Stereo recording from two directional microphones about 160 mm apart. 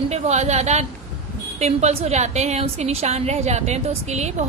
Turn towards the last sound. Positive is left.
turn(degrees=-45)  # may be behind; listen again after turning